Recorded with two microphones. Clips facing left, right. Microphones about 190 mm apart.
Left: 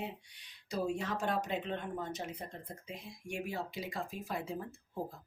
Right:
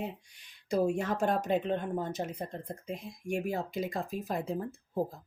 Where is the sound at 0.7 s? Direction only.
50° right (ahead or behind).